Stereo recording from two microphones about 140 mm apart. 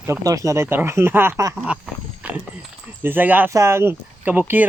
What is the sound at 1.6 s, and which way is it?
Wild animals, 5° right (ahead or behind).